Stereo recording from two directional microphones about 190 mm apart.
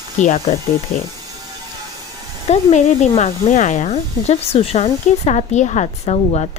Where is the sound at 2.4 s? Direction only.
35° left (ahead or behind).